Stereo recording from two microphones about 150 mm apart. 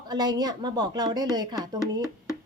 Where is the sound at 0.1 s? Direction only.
25° right (ahead or behind).